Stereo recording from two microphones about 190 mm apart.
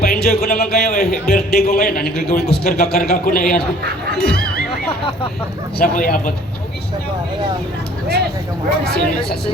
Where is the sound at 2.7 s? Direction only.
55° left (ahead or behind).